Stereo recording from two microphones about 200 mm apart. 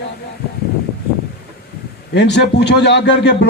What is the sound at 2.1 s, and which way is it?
Speech, 55° left (ahead or behind).